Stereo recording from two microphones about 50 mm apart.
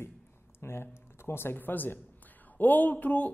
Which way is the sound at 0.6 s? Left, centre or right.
Left.